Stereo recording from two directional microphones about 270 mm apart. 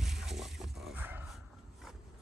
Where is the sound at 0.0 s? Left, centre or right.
Centre.